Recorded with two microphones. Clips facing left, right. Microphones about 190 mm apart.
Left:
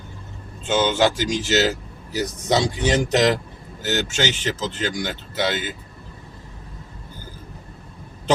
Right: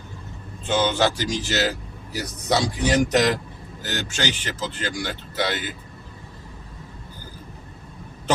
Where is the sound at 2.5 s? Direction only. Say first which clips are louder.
Left 1 dB; 25° left (ahead or behind).